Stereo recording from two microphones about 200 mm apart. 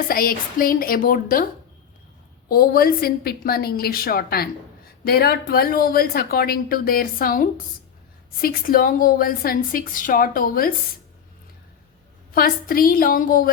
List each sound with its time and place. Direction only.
0.1 s speech: 45° left (ahead or behind)
2.5 s speech: 45° left (ahead or behind)
12.3 s speech: 45° left (ahead or behind)